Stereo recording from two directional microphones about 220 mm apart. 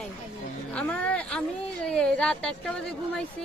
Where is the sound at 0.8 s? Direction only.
5° left (ahead or behind).